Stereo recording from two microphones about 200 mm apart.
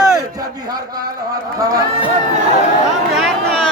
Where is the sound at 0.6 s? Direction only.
20° right (ahead or behind).